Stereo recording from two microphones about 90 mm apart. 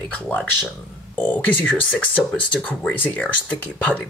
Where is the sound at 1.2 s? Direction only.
20° left (ahead or behind).